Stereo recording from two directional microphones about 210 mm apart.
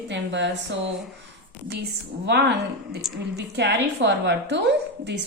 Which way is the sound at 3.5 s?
55° right (ahead or behind).